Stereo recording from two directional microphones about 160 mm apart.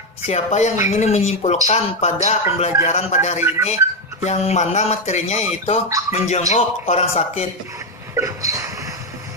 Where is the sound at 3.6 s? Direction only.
45° left (ahead or behind).